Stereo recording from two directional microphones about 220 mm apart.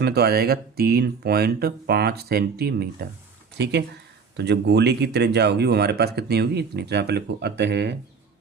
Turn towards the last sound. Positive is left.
turn(degrees=-50)  # may be behind; listen again after turning